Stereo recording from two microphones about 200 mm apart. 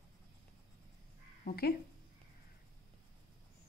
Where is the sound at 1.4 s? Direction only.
50° left (ahead or behind).